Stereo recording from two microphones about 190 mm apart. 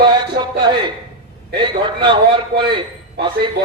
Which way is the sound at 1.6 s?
25° right (ahead or behind).